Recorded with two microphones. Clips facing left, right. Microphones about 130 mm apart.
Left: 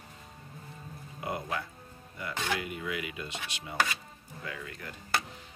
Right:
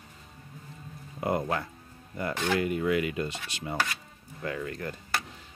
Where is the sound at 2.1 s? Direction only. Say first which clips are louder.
Right 6 dB; 45° right (ahead or behind).